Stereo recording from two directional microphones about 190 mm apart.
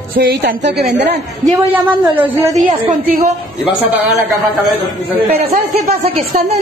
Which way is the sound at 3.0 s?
40° right (ahead or behind).